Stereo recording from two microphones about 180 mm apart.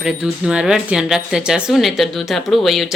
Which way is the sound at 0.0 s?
5° right (ahead or behind).